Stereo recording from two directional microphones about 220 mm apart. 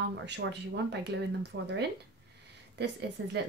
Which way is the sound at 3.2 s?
55° right (ahead or behind).